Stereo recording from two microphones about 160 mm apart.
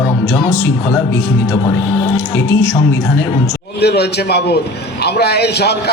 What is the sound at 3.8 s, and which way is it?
A man's voice, 90° left.